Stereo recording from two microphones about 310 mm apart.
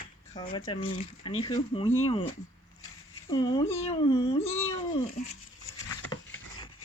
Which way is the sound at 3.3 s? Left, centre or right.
Centre.